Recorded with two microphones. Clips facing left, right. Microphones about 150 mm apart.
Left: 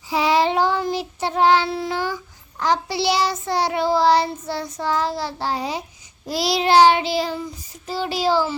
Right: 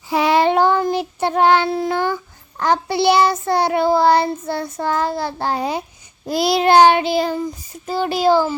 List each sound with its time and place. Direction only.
0.1 s child singing: 55° right (ahead or behind)